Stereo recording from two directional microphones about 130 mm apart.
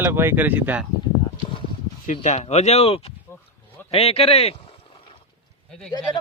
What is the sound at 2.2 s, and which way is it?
Speech, 60° left (ahead or behind).